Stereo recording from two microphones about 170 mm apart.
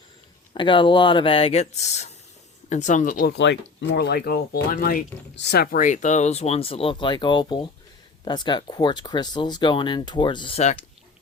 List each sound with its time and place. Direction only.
0.5 s speech: 30° left (ahead or behind); by 3.3 s 55° left (ahead or behind)
3.3 s speech: 90° left
5.7 s speech: 50° left (ahead or behind); by 10.6 s 30° left (ahead or behind)